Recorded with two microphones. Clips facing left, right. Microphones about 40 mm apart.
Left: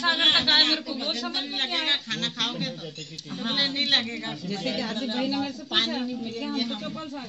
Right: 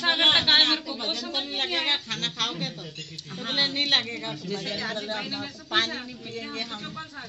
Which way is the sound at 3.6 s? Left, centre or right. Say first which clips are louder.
Right 1 dB; left.